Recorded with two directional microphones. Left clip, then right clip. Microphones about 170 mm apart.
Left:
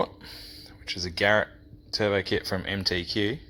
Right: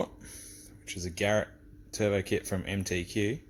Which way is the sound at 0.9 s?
10° right (ahead or behind).